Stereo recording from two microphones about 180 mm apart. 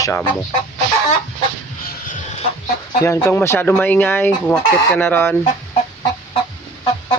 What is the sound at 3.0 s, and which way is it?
Speech, 20° left (ahead or behind).